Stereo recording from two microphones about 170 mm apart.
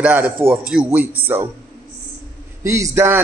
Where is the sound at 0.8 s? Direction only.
10° right (ahead or behind).